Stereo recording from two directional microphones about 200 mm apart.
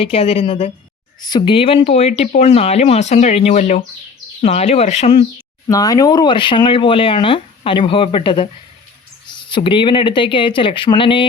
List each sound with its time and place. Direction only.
0.0 s speech: 30° left (ahead or behind)
5.6 s speech: 15° left (ahead or behind)